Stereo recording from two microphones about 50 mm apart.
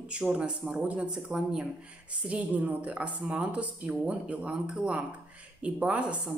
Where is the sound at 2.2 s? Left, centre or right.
Right.